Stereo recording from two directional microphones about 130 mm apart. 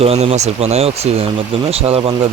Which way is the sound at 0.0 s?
50° right (ahead or behind).